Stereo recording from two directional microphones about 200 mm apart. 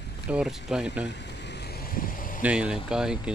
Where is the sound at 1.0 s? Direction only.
60° left (ahead or behind); by 2.4 s 45° left (ahead or behind).